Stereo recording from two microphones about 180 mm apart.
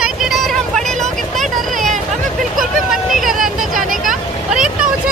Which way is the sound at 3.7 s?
50° right (ahead or behind).